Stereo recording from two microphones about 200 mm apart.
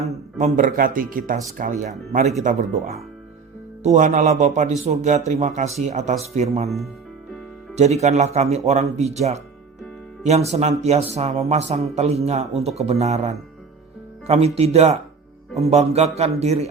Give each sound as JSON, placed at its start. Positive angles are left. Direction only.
{"t": 0.3, "sound": "a man's voice", "side_deg": -40}
{"t": 3.8, "sound": "a man's voice", "side_deg": -40}
{"t": 6.7, "sound": "speech", "side_deg": 0}
{"t": 7.8, "sound": "a man's voice", "side_deg": -35}
{"t": 10.2, "sound": "a man's voice", "side_deg": -35}